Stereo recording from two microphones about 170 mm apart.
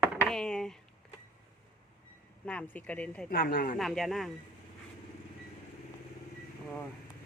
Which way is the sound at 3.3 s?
60° left (ahead or behind).